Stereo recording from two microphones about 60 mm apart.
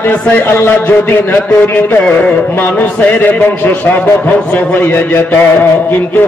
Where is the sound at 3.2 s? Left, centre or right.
Left.